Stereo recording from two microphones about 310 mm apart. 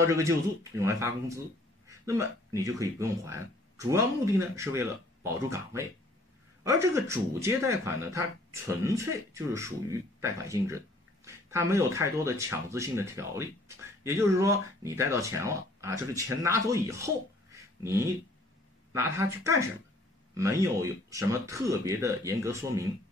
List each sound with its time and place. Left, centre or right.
0.1 s speech: centre